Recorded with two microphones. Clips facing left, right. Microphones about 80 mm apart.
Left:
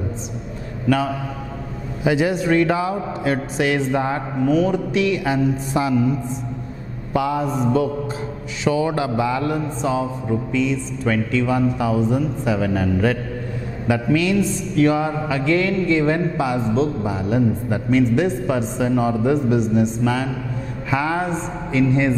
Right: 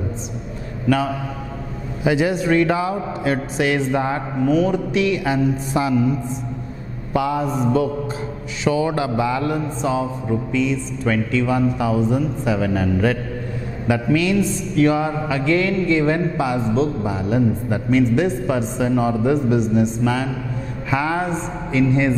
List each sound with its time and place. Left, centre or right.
0.8 s speech: centre
7.2 s speech: centre